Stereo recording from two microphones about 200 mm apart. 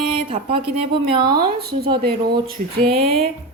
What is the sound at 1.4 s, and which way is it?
Speech, 50° right (ahead or behind).